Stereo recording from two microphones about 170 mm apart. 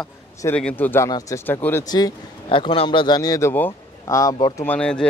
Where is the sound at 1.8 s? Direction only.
25° left (ahead or behind).